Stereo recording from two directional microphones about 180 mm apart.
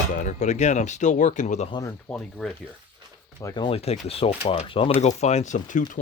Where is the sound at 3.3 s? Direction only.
25° left (ahead or behind); by 6.0 s 45° left (ahead or behind).